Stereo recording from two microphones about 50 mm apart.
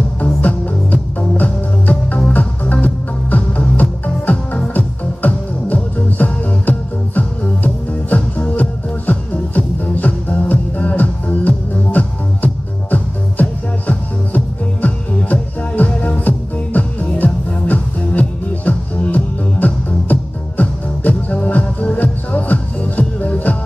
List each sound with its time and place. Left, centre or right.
0.2 s music: left
21.1 s music: left